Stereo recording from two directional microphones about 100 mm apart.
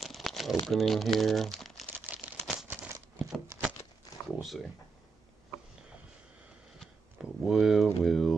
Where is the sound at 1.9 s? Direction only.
15° right (ahead or behind).